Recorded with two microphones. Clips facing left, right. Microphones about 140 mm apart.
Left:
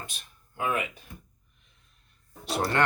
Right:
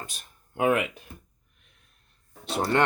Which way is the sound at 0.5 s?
70° right (ahead or behind).